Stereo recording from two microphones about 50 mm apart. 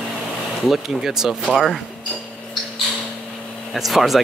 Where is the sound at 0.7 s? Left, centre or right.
Centre.